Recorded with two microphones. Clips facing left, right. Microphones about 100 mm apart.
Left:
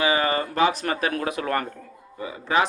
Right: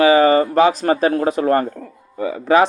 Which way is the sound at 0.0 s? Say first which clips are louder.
Right 10 dB; 35° right (ahead or behind).